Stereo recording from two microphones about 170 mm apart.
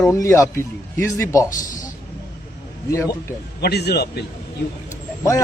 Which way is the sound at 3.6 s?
75° left (ahead or behind).